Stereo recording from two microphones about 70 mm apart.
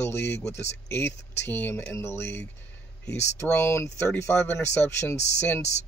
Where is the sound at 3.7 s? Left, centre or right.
Left.